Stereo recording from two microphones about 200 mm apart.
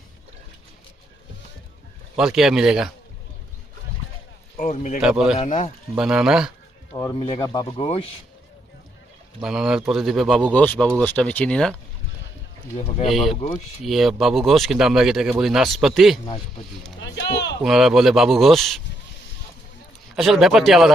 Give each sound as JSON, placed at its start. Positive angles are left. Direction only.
{"t": 2.1, "sound": "speech", "side_deg": 0}
{"t": 4.5, "sound": "speech", "side_deg": 35}
{"t": 4.9, "sound": "speech", "side_deg": -5}
{"t": 5.5, "sound": "speech", "side_deg": 35}
{"t": 5.9, "sound": "speech", "side_deg": -5}
{"t": 6.9, "sound": "speech", "side_deg": 20}
{"t": 9.4, "sound": "speech", "side_deg": -5}
{"t": 13.1, "sound": "speech", "side_deg": 0}
{"t": 17.6, "sound": "speech", "side_deg": 0}
{"t": 20.1, "sound": "speech", "side_deg": 0}